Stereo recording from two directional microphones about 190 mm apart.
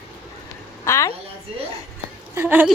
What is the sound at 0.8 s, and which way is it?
Speech, 15° left (ahead or behind).